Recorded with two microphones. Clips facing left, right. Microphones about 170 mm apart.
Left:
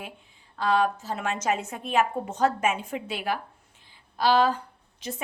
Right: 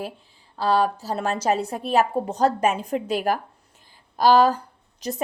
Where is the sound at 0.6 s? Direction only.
35° right (ahead or behind).